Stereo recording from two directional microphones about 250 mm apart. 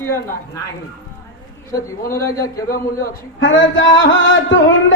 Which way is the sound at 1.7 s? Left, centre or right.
Centre.